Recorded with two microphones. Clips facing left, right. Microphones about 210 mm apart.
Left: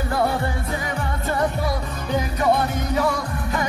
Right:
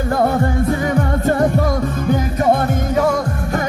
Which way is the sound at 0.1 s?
45° right (ahead or behind).